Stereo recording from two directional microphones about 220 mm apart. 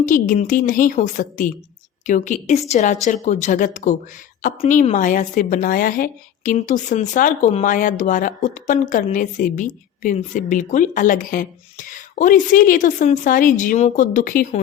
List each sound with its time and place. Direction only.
0.0 s a woman's voice: 35° left (ahead or behind)